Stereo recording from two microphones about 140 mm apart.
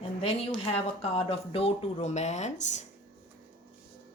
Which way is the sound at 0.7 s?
40° left (ahead or behind).